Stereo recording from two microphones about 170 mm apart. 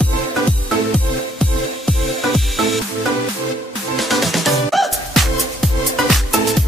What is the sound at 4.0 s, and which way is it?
Music, centre (ahead or behind).